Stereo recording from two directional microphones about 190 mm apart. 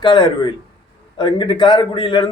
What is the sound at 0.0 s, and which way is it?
A man's voice, 25° left (ahead or behind).